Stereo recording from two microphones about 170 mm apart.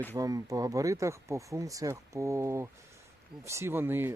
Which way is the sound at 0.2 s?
20° right (ahead or behind).